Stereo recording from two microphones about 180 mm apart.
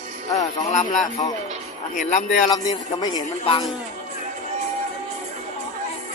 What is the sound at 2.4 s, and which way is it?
Speech, 20° left (ahead or behind).